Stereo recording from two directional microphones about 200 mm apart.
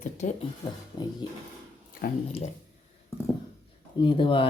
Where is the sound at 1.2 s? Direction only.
20° left (ahead or behind).